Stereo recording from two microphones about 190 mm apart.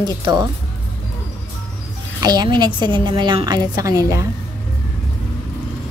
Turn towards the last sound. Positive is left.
turn(degrees=-15)  # may be behind; listen again after turning